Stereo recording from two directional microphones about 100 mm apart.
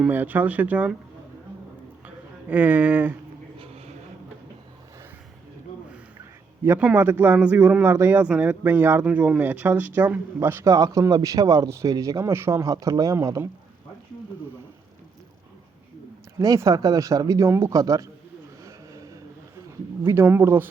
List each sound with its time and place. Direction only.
0.1 s speech: 20° right (ahead or behind)
2.0 s speech: 15° right (ahead or behind)
6.7 s speech: 15° right (ahead or behind)
7.9 s speech: 25° right (ahead or behind)
8.2 s speech: 15° right (ahead or behind)
9.0 s speech: 10° right (ahead or behind)
10.6 s speech: 35° right (ahead or behind)
16.4 s speech: 35° right (ahead or behind)
17.7 s speech: 35° right (ahead or behind)
18.6 s a sound: 35° right (ahead or behind)
20.1 s speech: 25° right (ahead or behind)